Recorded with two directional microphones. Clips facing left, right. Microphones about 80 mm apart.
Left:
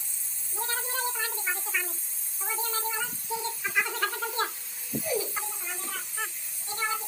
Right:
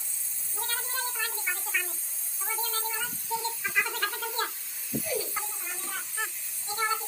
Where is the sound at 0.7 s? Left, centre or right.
Centre.